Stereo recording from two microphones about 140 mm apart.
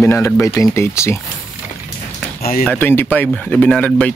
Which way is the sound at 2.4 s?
90° left.